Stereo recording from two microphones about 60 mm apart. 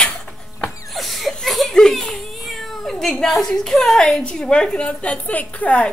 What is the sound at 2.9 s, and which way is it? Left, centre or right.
A woman's voice, centre.